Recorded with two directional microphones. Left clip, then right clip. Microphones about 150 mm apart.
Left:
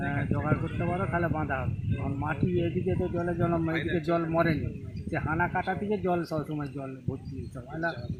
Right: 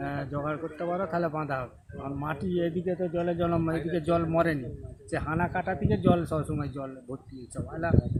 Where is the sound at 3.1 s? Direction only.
30° right (ahead or behind).